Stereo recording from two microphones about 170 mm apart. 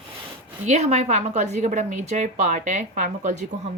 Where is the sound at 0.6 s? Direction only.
40° right (ahead or behind).